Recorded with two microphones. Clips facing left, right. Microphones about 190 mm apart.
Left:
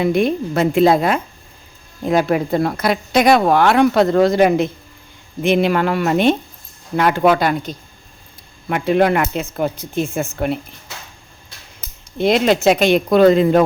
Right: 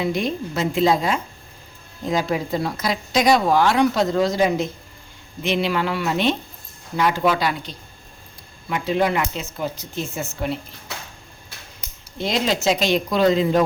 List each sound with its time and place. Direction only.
0.0 s speech: 55° left (ahead or behind)
12.1 s speech: 60° left (ahead or behind)